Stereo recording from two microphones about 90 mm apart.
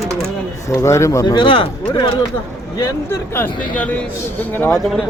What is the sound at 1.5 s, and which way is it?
Speech, 70° left (ahead or behind).